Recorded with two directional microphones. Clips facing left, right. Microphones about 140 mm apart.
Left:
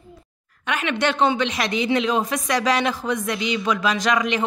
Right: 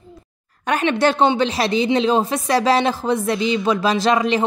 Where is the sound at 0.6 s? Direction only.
35° right (ahead or behind).